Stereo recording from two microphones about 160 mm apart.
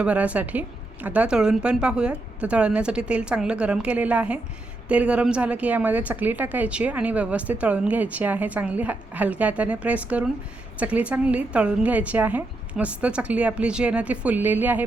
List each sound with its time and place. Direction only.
0.0 s a woman's voice: 10° right (ahead or behind)